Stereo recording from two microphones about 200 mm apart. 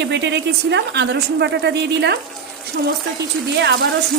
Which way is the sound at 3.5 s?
60° right (ahead or behind).